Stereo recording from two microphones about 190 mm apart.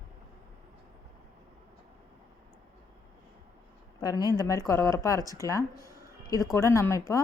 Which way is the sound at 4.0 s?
20° left (ahead or behind).